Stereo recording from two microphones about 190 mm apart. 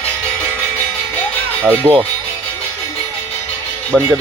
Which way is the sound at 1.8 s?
15° right (ahead or behind).